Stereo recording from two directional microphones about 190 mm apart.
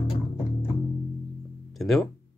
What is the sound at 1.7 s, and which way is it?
Music, centre (ahead or behind).